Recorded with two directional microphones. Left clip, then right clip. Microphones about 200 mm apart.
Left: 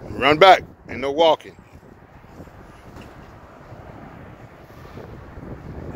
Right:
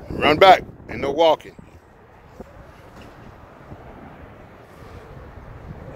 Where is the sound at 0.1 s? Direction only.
10° left (ahead or behind).